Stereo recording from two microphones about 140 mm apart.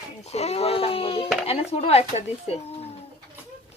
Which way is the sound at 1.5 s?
45° left (ahead or behind).